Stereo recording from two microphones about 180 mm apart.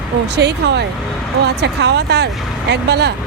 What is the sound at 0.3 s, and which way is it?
Speech, 70° right (ahead or behind).